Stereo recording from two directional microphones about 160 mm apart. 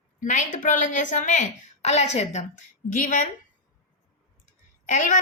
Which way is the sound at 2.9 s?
55° left (ahead or behind).